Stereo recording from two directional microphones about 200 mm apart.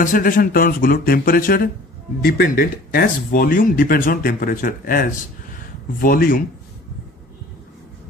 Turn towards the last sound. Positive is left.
turn(degrees=45)  # may be behind; listen again after turning